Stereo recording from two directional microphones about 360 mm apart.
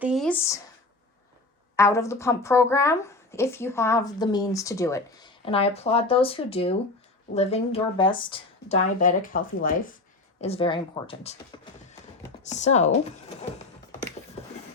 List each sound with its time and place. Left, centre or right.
0.0 s speech: centre
1.7 s speech: centre